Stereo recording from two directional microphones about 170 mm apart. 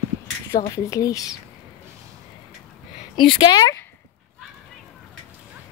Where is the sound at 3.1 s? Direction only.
30° left (ahead or behind).